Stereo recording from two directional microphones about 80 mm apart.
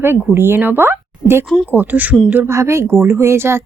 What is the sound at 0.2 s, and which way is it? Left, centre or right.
Speech, right.